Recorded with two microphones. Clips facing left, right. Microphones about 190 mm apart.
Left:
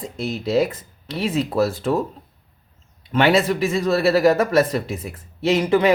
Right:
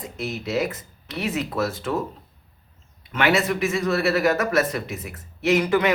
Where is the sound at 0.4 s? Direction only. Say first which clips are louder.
Left 6 dB; 35° left (ahead or behind).